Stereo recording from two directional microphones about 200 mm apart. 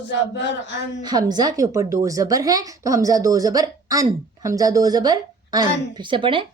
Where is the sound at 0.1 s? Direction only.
65° left (ahead or behind).